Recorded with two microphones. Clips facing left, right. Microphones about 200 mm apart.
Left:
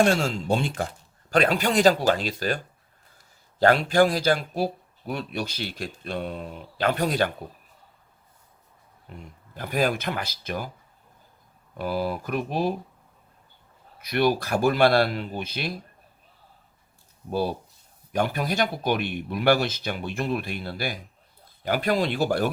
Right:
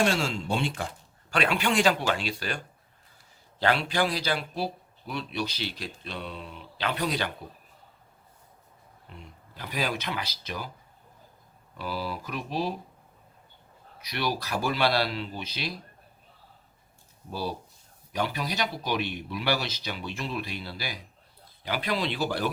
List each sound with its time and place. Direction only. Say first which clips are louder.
0.0 s speech: left 5 dB; 45° left (ahead or behind)
3.6 s speech: left 7 dB; 45° left (ahead or behind)
9.1 s speech: left 5 dB; 45° left (ahead or behind)
11.8 s speech: left 6 dB; 50° left (ahead or behind)
14.0 s speech: left 8 dB; 50° left (ahead or behind)
18.1 s speech: left 5 dB; 50° left (ahead or behind)